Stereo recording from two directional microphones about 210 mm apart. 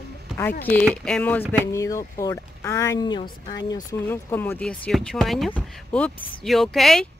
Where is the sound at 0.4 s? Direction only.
10° left (ahead or behind).